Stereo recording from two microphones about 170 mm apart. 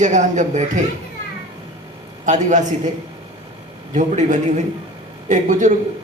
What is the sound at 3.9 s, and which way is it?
A woman's voice, 45° right (ahead or behind).